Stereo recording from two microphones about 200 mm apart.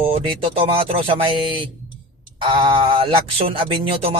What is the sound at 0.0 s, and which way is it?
Speech, 30° right (ahead or behind).